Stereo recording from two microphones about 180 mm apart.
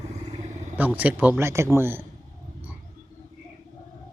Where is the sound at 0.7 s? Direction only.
10° right (ahead or behind).